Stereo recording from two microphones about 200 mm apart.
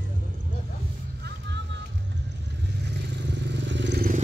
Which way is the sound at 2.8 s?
60° right (ahead or behind).